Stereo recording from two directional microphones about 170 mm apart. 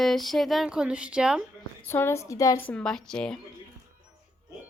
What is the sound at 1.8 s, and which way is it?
Speech, 15° left (ahead or behind).